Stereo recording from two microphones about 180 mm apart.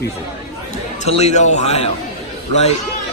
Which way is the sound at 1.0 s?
40° left (ahead or behind).